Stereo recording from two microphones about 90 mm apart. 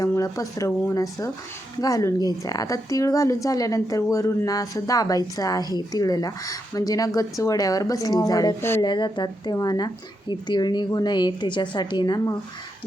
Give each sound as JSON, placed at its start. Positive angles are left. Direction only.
{"t": 0.0, "sound": "speech", "side_deg": 40}
{"t": 1.8, "sound": "a woman's voice", "side_deg": 40}
{"t": 8.8, "sound": "a woman's voice", "side_deg": 60}